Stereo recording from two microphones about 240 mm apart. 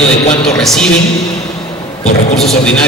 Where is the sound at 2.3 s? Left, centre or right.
Centre.